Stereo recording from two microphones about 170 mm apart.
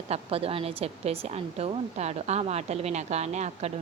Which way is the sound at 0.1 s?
35° right (ahead or behind).